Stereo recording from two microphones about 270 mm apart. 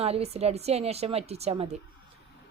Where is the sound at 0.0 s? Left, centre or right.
Right.